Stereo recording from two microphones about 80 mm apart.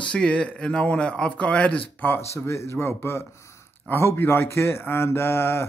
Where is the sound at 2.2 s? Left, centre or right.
Left.